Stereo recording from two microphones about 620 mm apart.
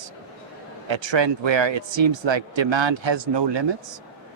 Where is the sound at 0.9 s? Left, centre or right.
Right.